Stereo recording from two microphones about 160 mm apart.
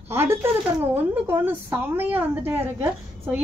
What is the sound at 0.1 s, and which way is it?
A woman's voice, 15° right (ahead or behind).